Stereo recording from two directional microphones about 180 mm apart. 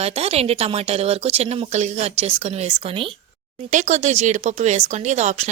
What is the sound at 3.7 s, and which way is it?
A woman's voice, 40° right (ahead or behind).